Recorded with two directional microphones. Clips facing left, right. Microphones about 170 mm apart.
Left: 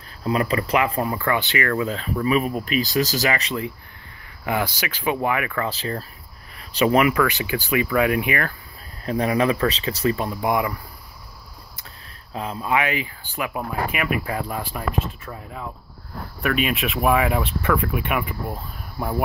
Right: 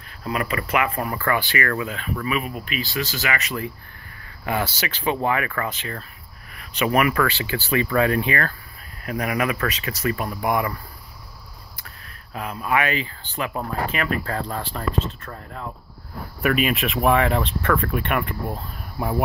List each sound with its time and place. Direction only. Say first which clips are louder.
0.2 s speech: left 4 dB; 30° left (ahead or behind)
4.5 s speech: left 1 dB; 15° left (ahead or behind)
5.7 s speech: left 4 dB; 35° left (ahead or behind); by 8.5 s 15° left (ahead or behind)
9.0 s speech: left 4 dB; 30° left (ahead or behind)
12.4 s speech: even; 25° left (ahead or behind); by 19.2 s centre (ahead or behind)